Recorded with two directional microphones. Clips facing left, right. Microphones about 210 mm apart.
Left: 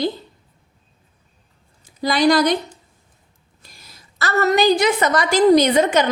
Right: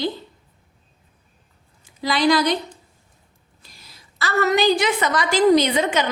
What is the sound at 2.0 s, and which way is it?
Speech, 45° left (ahead or behind).